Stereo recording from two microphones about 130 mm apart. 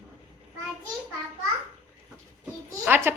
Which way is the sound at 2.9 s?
15° right (ahead or behind).